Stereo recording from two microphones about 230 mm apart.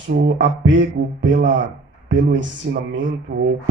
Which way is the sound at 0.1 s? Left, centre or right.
Right.